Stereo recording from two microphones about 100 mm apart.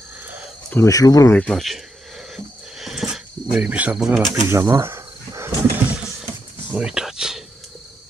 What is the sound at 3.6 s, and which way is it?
Cricket, 15° right (ahead or behind).